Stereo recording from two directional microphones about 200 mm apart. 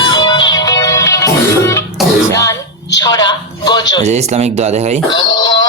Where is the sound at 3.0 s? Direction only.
20° left (ahead or behind).